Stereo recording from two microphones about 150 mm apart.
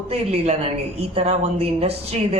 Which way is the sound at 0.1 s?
45° right (ahead or behind).